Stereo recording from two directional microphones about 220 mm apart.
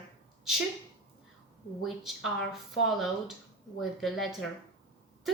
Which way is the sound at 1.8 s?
Centre (ahead or behind).